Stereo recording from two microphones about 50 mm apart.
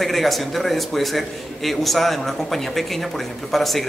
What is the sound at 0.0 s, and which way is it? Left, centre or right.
A man's voice, centre.